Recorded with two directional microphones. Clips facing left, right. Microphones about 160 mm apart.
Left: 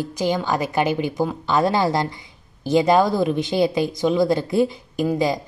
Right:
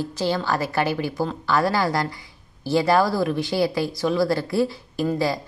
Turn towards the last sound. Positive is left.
turn(degrees=20)  # may be behind; listen again after turning